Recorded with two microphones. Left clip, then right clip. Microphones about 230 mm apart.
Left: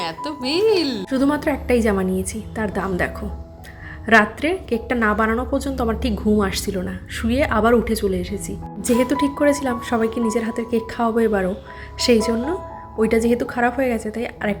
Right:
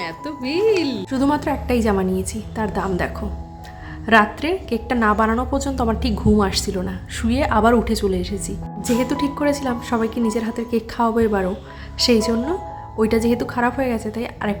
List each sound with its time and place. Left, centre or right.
0.0 s a woman's voice: centre